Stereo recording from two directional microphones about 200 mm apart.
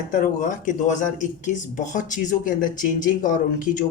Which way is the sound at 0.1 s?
40° left (ahead or behind).